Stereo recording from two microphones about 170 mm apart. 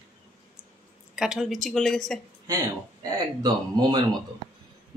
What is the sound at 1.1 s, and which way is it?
Speech, 5° right (ahead or behind).